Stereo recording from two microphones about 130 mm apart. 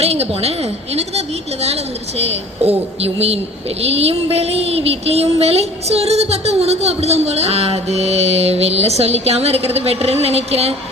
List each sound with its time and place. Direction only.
0.0 s a woman's voice: 55° right (ahead or behind)